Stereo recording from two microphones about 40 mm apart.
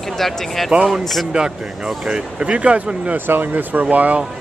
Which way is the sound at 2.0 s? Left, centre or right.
Right.